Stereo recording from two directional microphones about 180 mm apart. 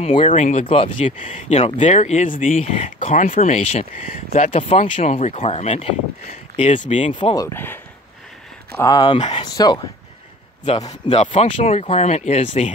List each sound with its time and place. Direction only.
0.0 s speech: 30° left (ahead or behind)
7.2 s speech: 25° left (ahead or behind)
9.4 s speech: 25° left (ahead or behind)